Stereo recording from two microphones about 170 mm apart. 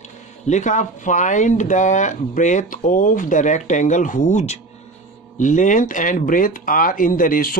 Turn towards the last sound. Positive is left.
turn(degrees=55)  # may be behind; listen again after turning